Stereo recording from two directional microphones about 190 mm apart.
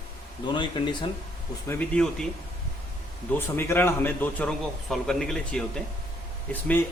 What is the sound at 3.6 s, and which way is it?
Speech, 15° left (ahead or behind).